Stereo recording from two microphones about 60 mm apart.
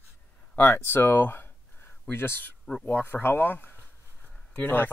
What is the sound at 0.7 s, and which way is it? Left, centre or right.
Speech, left.